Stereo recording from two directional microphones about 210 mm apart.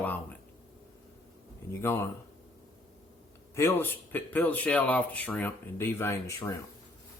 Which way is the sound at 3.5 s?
10° left (ahead or behind).